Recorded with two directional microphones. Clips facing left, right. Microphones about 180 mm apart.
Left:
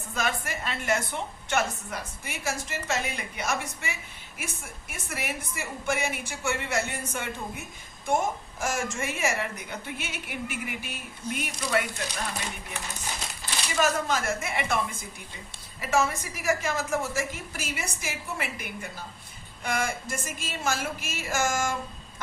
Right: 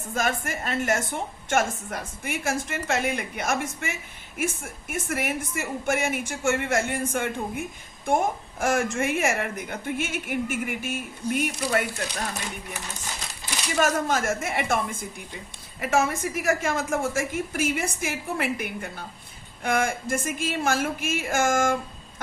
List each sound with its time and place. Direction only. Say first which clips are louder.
0.0 s a woman's voice: right 3 dB; 45° right (ahead or behind)
13.7 s a woman's voice: right 2 dB; 50° right (ahead or behind)